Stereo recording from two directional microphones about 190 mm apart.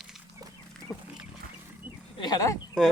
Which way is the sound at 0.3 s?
20° right (ahead or behind).